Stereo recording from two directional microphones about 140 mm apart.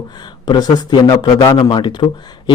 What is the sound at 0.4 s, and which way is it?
A man's voice, 30° left (ahead or behind).